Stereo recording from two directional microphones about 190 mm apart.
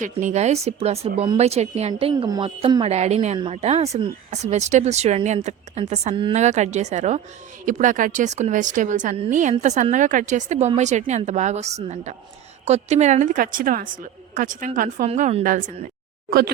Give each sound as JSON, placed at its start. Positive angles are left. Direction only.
{"t": 0.0, "sound": "a woman's voice", "side_deg": -40}